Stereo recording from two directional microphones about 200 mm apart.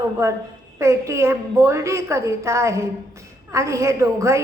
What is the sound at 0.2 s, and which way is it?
A woman's voice, 15° right (ahead or behind).